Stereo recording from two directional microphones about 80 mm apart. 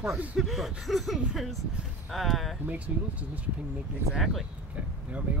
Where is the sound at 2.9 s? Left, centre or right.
Centre.